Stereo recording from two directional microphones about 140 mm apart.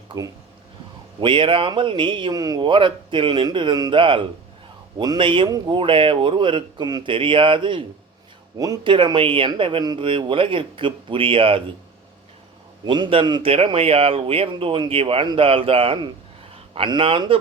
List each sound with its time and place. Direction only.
0.1 s speech: 25° right (ahead or behind)
1.2 s speech: 35° right (ahead or behind)
8.5 s speech: 25° right (ahead or behind)
12.8 s speech: 35° right (ahead or behind)